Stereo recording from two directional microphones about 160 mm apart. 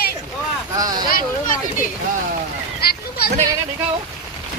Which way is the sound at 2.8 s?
75° left (ahead or behind).